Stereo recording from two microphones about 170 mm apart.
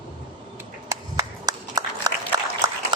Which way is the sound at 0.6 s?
20° right (ahead or behind).